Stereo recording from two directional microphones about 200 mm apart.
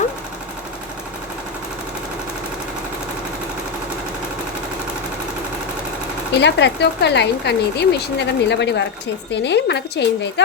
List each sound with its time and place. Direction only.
6.4 s speech: 55° left (ahead or behind)